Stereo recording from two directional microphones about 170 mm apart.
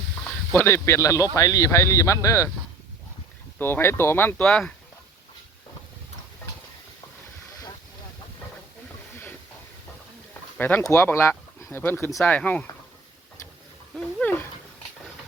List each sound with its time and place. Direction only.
0.5 s speech: 15° left (ahead or behind)
3.6 s speech: 15° left (ahead or behind)
10.6 s speech: 10° left (ahead or behind)
13.9 s speech: 5° left (ahead or behind)